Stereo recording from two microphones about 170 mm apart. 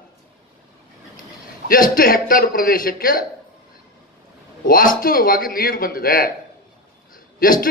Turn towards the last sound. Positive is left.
turn(degrees=55)  # may be behind; listen again after turning